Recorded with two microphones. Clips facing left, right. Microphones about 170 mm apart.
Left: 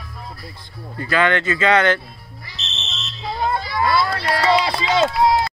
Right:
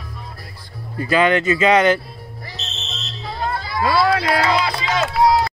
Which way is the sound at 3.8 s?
90° right.